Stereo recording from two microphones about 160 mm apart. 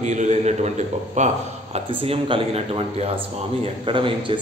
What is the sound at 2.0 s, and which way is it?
A man's voice, 35° right (ahead or behind).